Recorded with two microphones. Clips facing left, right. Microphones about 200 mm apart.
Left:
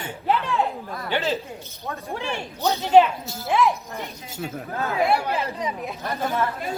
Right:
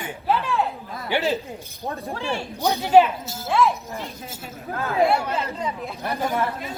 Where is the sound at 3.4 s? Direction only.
15° left (ahead or behind).